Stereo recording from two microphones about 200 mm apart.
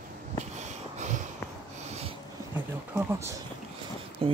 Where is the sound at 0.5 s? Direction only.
35° right (ahead or behind).